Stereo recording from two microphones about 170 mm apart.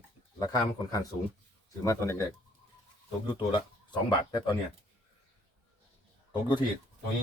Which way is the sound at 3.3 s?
25° left (ahead or behind).